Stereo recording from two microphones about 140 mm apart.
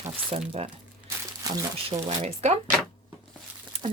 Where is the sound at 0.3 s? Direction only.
45° right (ahead or behind).